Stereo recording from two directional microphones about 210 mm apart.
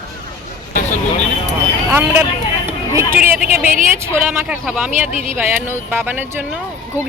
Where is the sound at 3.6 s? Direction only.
40° right (ahead or behind).